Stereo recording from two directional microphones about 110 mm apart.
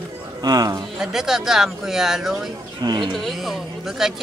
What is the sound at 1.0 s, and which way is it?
Speech, 5° right (ahead or behind).